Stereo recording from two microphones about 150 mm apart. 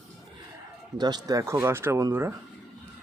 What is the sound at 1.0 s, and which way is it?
Speech, 25° right (ahead or behind).